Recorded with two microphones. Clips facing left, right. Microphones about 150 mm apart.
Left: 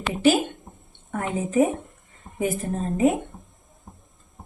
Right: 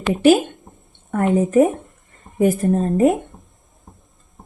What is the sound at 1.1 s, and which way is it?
Speech, 55° right (ahead or behind).